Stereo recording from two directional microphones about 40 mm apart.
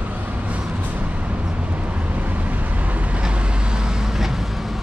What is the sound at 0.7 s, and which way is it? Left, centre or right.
Vehicle, right.